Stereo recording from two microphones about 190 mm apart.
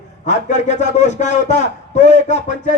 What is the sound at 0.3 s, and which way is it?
A man's voice, 40° left (ahead or behind).